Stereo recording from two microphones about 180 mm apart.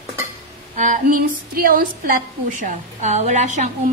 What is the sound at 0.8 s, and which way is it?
Speech, 45° right (ahead or behind).